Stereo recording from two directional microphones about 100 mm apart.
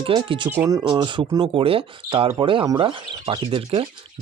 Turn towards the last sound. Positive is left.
turn(degrees=-65)  # may be behind; listen again after turning